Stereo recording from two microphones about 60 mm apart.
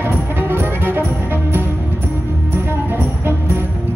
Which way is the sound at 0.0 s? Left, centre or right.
Right.